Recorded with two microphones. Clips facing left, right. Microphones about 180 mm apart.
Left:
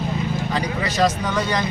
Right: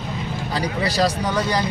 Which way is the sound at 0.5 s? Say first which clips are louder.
Right 1 dB; 35° right (ahead or behind).